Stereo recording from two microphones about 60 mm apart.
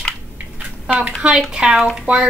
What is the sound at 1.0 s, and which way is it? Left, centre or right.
A woman's voice, centre.